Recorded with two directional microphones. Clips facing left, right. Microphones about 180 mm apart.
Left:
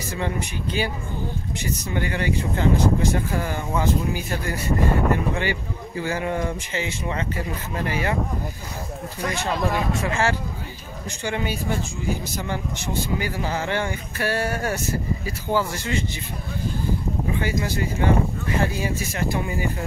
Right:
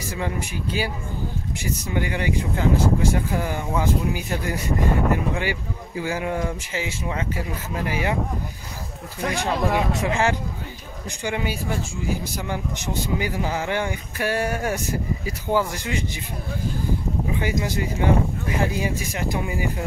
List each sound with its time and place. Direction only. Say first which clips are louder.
0.1 s speech: left 1 dB; 5° right (ahead or behind)
9.3 s speech: right 2 dB; 15° right (ahead or behind)
17.3 s speech: even; 15° right (ahead or behind)